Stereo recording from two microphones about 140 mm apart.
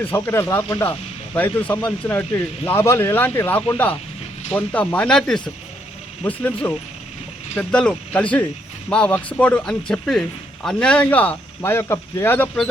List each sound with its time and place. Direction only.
0.0 s speech: 15° left (ahead or behind)